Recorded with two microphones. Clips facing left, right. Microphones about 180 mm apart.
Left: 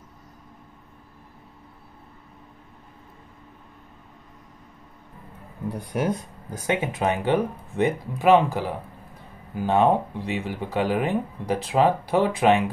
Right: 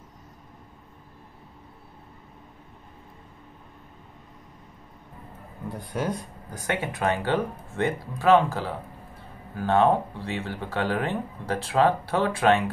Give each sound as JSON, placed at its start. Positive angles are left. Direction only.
{"t": 5.7, "sound": "speech", "side_deg": 15}